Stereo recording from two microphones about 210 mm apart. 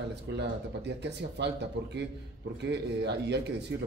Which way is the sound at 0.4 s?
55° right (ahead or behind).